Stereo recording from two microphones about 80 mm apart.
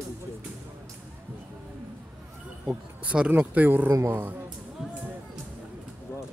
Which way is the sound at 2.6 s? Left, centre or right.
Centre.